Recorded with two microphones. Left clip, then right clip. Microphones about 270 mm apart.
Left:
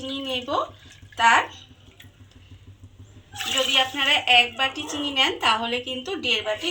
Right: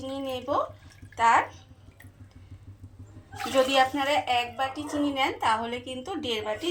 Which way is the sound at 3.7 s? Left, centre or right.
Right.